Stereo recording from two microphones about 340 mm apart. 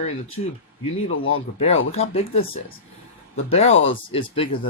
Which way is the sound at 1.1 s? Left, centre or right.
Left.